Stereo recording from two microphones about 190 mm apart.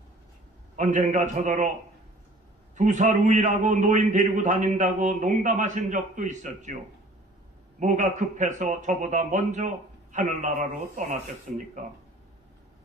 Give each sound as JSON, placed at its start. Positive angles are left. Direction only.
{"t": 0.7, "sound": "a man's voice", "side_deg": -40}
{"t": 2.7, "sound": "a man's voice", "side_deg": -40}
{"t": 7.8, "sound": "a man's voice", "side_deg": -40}